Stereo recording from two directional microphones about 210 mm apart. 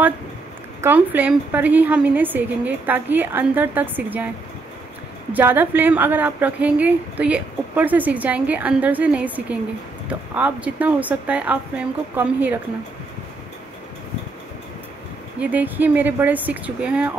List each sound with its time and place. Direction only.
0.7 s a woman's voice: 10° right (ahead or behind)
5.3 s a woman's voice: 10° right (ahead or behind)
15.4 s a woman's voice: 10° right (ahead or behind)